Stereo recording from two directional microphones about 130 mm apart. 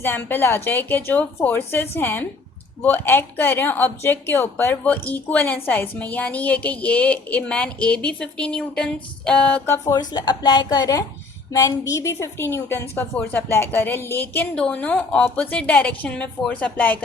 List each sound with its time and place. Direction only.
0.0 s speech: 15° left (ahead or behind)
10.0 s a woman's voice: 35° left (ahead or behind); by 17.0 s 10° left (ahead or behind)